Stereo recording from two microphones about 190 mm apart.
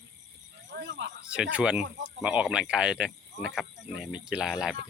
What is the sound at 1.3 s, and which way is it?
Speech, 5° right (ahead or behind).